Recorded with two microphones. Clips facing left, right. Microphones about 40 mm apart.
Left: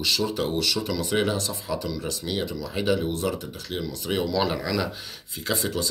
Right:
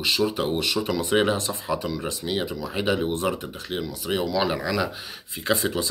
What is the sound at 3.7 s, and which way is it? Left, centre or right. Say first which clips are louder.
Speech: right 1 dB; centre.